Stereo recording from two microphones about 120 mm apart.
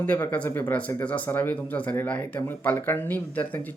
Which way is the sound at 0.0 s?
15° left (ahead or behind).